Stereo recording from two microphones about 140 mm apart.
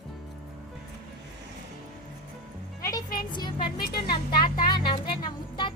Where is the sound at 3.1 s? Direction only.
30° left (ahead or behind).